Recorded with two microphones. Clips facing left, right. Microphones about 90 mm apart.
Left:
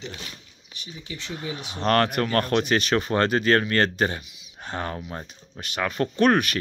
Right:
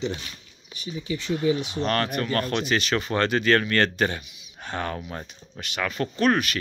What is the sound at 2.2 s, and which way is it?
Speech, 45° left (ahead or behind).